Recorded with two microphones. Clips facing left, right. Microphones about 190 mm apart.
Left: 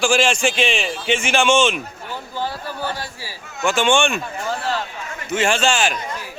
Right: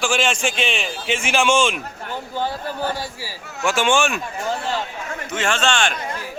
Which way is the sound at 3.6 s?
5° right (ahead or behind).